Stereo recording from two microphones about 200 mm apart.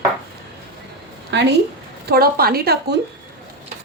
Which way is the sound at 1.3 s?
60° right (ahead or behind).